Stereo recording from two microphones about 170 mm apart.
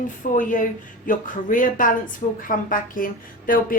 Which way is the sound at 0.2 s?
50° left (ahead or behind).